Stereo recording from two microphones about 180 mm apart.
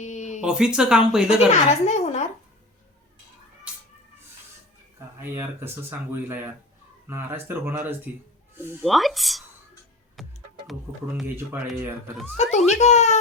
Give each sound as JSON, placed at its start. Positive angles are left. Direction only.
{"t": 0.0, "sound": "a sound", "side_deg": 40}
{"t": 0.4, "sound": "speech", "side_deg": -5}
{"t": 1.8, "sound": "a woman's voice", "side_deg": 40}
{"t": 3.7, "sound": "a sound", "side_deg": -5}
{"t": 4.9, "sound": "speech", "side_deg": -15}
{"t": 8.8, "sound": "speech", "side_deg": 0}
{"t": 10.2, "sound": "music", "side_deg": 0}
{"t": 11.5, "sound": "speech", "side_deg": -10}
{"t": 12.4, "sound": "a child's voice", "side_deg": 40}